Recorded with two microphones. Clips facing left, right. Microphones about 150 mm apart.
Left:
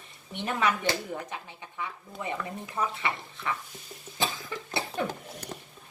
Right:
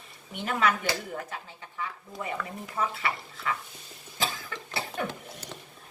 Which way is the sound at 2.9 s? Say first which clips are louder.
Even; 25° left (ahead or behind).